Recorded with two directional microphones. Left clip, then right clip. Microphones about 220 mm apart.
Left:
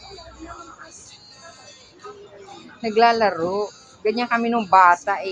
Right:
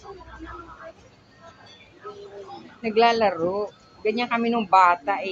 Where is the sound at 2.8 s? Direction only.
15° left (ahead or behind).